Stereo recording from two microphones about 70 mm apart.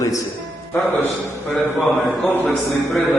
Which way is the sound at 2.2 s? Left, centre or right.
Left.